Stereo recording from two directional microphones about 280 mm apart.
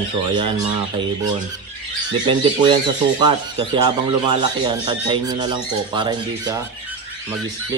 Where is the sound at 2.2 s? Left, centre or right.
Centre.